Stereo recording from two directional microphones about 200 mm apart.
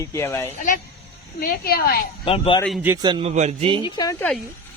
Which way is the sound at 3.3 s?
35° right (ahead or behind).